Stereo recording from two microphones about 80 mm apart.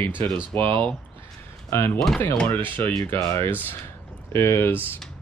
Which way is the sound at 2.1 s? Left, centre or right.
Centre.